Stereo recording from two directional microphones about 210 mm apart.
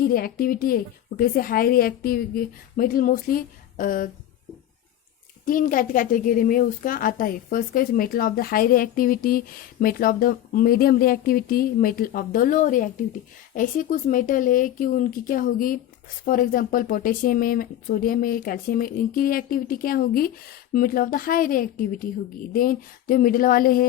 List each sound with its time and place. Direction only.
0.0 s a woman's voice: 45° left (ahead or behind)
5.5 s a woman's voice: 40° left (ahead or behind)